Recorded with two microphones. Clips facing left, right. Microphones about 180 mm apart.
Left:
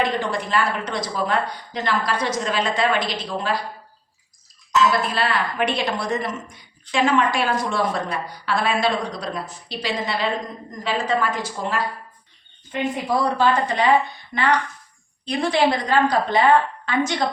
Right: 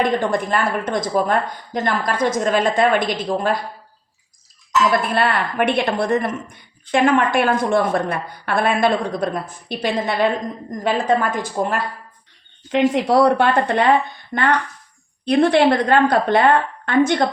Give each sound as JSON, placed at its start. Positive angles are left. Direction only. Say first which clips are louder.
{"t": 0.0, "sound": "a woman's voice", "louder": "right 4 dB", "side_deg": -50}
{"t": 4.9, "sound": "a woman's voice", "louder": "right 3 dB", "side_deg": -55}
{"t": 12.6, "sound": "a woman's voice", "louder": "right 8 dB", "side_deg": -90}
{"t": 14.3, "sound": "a woman's voice", "louder": "right 3 dB", "side_deg": -45}
{"t": 15.2, "sound": "a woman's voice", "louder": "right 6 dB", "side_deg": -60}